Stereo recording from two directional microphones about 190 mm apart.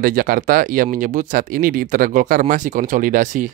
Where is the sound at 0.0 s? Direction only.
45° right (ahead or behind).